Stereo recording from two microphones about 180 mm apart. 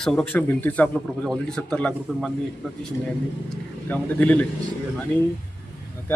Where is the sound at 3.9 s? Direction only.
10° left (ahead or behind).